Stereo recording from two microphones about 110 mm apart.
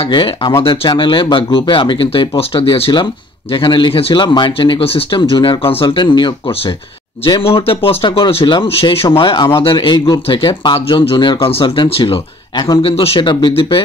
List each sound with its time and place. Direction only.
0.1 s speech: 45° left (ahead or behind)
5.9 s speech: 45° left (ahead or behind)
9.2 s speech: 45° left (ahead or behind)
12.8 s speech: 60° left (ahead or behind)